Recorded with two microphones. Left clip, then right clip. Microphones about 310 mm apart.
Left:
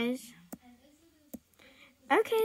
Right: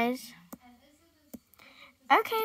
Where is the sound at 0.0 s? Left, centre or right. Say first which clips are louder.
Right 4 dB; right.